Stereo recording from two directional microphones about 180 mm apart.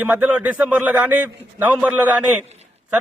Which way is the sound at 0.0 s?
10° right (ahead or behind).